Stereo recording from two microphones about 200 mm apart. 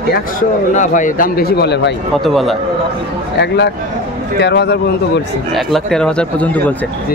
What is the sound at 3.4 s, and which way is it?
A man's voice, 55° left (ahead or behind).